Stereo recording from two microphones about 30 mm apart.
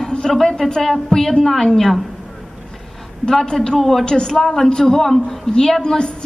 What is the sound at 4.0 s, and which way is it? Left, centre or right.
Speech, left.